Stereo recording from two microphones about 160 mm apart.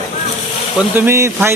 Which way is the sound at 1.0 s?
15° right (ahead or behind).